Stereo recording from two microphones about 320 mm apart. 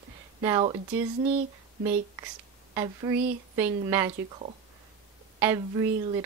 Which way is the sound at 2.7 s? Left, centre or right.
Centre.